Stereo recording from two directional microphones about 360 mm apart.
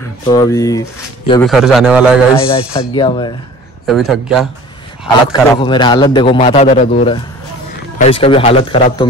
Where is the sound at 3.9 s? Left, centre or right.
Centre.